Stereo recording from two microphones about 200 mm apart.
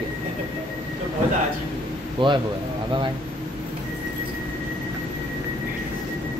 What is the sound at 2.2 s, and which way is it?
Speech, 25° right (ahead or behind).